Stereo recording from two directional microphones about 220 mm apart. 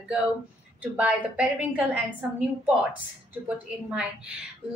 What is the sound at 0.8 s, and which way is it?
A woman's voice, 5° right (ahead or behind).